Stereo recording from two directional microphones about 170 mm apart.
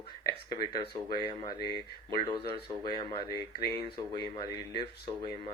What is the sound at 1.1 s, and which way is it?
Speech, 30° left (ahead or behind).